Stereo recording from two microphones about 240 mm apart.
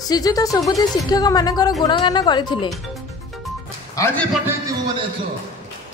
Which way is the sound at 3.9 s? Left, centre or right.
Centre.